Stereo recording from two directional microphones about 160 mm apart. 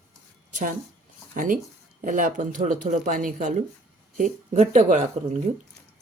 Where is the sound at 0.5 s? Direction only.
55° right (ahead or behind).